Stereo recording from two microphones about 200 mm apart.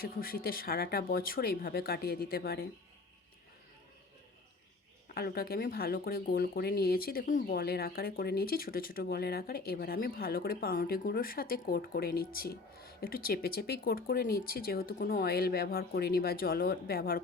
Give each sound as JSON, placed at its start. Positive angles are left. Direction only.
{"t": 0.2, "sound": "speech", "side_deg": 45}
{"t": 5.0, "sound": "speech", "side_deg": 50}